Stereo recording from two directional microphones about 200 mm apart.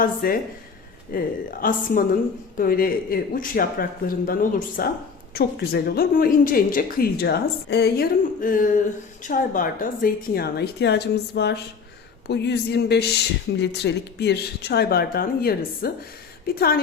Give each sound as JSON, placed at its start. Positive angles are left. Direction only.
{"t": 0.0, "sound": "speech", "side_deg": 45}